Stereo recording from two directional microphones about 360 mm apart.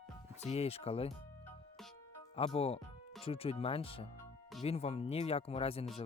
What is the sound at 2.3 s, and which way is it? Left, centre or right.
Speech, centre.